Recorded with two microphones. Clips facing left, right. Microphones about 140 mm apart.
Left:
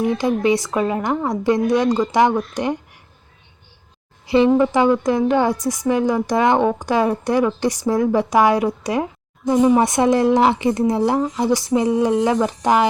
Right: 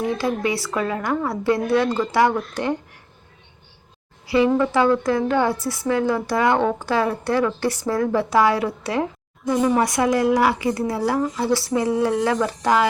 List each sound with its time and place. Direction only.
0.0 s a woman's voice: 20° left (ahead or behind)
4.3 s a woman's voice: 20° left (ahead or behind)